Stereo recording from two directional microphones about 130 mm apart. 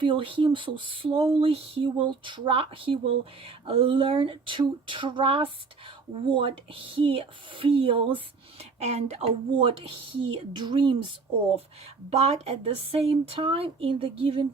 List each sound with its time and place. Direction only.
0.0 s speech: 40° right (ahead or behind)
9.6 s speech: 40° right (ahead or behind)
12.1 s speech: 50° right (ahead or behind)